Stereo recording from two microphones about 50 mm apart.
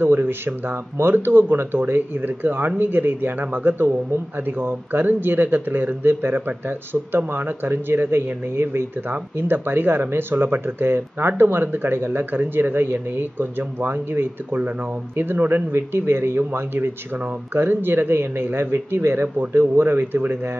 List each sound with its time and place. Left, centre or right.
0.0 s speech: right
9.1 s speech: right
15.7 s speech: right